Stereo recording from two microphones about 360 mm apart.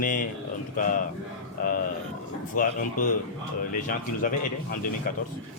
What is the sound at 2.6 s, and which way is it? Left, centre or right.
A man's voice, left.